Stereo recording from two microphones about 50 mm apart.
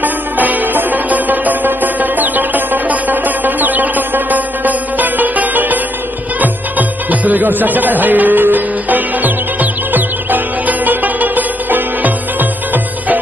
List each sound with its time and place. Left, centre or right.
0.0 s music: right